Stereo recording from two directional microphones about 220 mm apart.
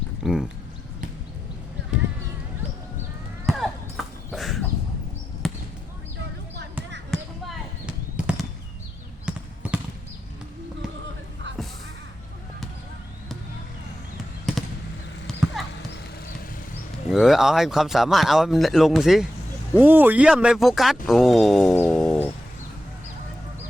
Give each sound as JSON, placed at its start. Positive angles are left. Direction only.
{"t": 0.2, "sound": "speech", "side_deg": -5}
{"t": 3.4, "sound": "horse", "side_deg": 0}
{"t": 5.4, "sound": "basketball bounce", "side_deg": 0}
{"t": 7.1, "sound": "basketball bounce", "side_deg": 0}
{"t": 9.2, "sound": "a sound", "side_deg": -5}
{"t": 15.3, "sound": "clip-clop", "side_deg": 0}
{"t": 17.1, "sound": "speech", "side_deg": 0}
{"t": 21.8, "sound": "a sound", "side_deg": 0}